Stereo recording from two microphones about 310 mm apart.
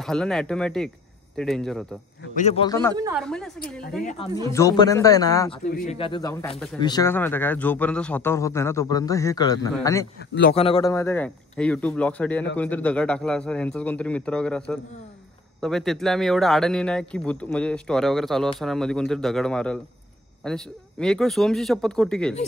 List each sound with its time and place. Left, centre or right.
0.0 s speech: centre
2.3 s a man's voice: centre
3.0 s a woman's voice: centre
3.3 s speech: centre
4.0 s speech: left
4.5 s a man's voice: centre
5.7 s a man's voice: left; by 22.3 s centre